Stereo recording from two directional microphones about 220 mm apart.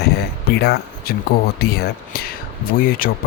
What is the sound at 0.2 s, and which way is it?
Speech, 45° left (ahead or behind).